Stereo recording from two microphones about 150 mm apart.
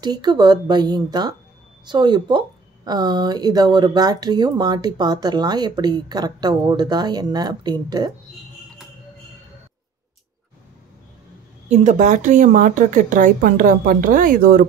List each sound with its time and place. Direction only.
0.0 s speech: 30° right (ahead or behind)
11.7 s a woman's voice: 55° right (ahead or behind); by 14.7 s 70° right (ahead or behind)